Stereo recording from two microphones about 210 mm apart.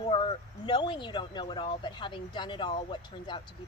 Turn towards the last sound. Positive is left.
turn(degrees=20)  # may be behind; listen again after turning